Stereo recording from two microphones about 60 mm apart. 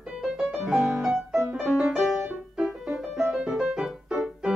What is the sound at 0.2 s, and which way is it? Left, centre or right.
Music, centre.